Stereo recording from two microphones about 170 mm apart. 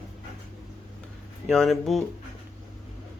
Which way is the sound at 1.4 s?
5° left (ahead or behind).